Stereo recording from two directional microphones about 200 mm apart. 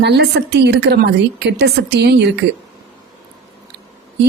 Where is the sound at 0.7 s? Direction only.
55° right (ahead or behind).